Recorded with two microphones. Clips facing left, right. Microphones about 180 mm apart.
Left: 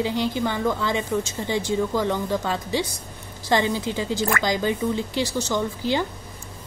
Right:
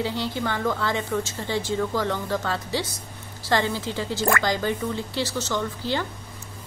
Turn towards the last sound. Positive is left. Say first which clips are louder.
# left 3 dB
turn(degrees=15)  # may be behind; listen again after turning